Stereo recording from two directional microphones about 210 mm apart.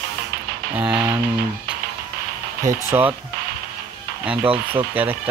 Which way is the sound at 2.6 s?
15° right (ahead or behind).